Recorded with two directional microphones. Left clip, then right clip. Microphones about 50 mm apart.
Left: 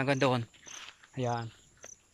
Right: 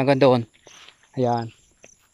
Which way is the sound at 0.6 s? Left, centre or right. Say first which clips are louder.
Even; centre.